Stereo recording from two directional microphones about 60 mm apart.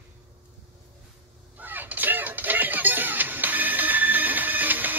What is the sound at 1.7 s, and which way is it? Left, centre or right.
Music, right.